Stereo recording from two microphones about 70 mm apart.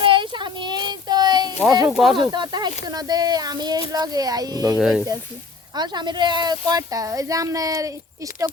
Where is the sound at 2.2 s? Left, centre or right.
Right.